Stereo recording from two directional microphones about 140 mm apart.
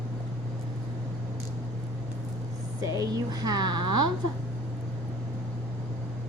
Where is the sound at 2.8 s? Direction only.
25° right (ahead or behind).